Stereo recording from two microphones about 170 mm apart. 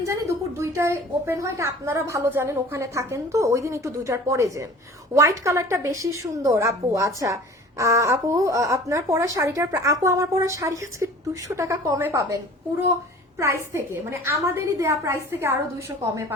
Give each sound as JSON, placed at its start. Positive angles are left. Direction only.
{"t": 0.0, "sound": "a woman's voice", "side_deg": -15}
{"t": 13.7, "sound": "a woman's voice", "side_deg": -15}